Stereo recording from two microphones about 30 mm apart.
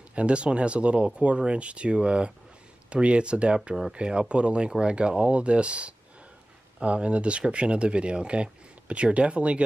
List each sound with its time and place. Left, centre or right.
0.1 s speech: right